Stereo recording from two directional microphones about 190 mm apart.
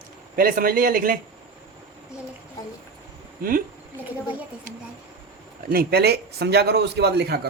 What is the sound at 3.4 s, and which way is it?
Speech, 50° right (ahead or behind).